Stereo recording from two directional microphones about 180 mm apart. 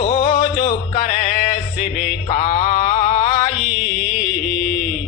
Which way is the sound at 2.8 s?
50° left (ahead or behind).